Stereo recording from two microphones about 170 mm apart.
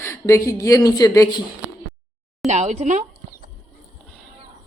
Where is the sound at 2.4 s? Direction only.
45° right (ahead or behind).